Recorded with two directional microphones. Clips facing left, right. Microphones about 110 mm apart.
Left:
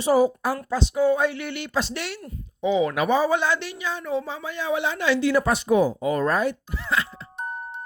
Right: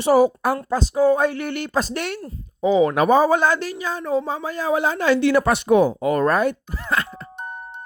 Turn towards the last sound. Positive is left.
turn(degrees=-50)  # may be behind; listen again after turning